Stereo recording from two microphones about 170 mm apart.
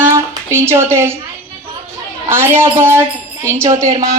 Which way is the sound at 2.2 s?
15° right (ahead or behind).